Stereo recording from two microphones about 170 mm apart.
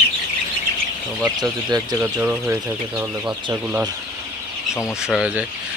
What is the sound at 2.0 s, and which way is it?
Speech, 10° right (ahead or behind).